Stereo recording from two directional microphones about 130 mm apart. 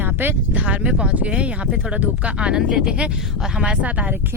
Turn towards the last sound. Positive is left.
turn(degrees=-10)  # may be behind; listen again after turning